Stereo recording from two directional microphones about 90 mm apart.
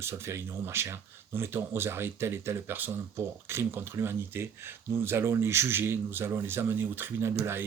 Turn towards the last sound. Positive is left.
turn(degrees=-25)  # may be behind; listen again after turning